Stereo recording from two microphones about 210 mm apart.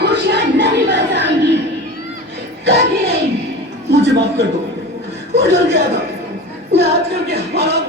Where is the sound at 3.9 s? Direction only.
55° right (ahead or behind).